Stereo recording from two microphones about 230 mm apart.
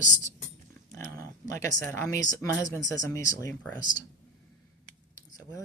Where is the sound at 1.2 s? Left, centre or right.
Centre.